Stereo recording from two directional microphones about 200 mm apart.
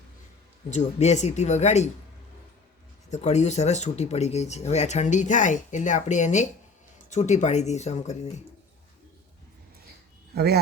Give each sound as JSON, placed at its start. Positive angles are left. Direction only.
{"t": 0.7, "sound": "speech", "side_deg": 35}
{"t": 3.1, "sound": "speech", "side_deg": 35}
{"t": 10.3, "sound": "speech", "side_deg": -55}